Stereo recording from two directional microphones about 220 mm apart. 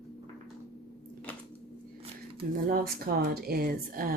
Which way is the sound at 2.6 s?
40° right (ahead or behind).